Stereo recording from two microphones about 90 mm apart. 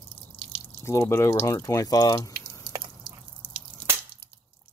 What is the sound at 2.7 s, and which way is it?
Drip, 55° right (ahead or behind).